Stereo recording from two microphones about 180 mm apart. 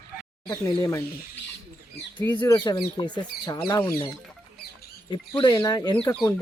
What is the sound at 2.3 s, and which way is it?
A woman's voice, 25° left (ahead or behind).